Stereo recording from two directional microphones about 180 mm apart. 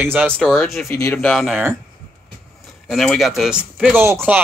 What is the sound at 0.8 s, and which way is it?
Speech, 15° left (ahead or behind).